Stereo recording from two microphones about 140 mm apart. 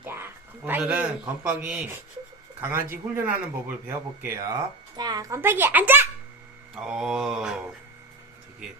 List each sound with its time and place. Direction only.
0.0 s a sound: 15° right (ahead or behind)
1.5 s speech: 10° right (ahead or behind); by 5.4 s 30° right (ahead or behind)
5.4 s speech: 15° right (ahead or behind)
6.8 s mantra: 5° right (ahead or behind)